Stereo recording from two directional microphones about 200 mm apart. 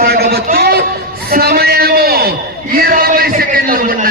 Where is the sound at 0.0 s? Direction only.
50° right (ahead or behind).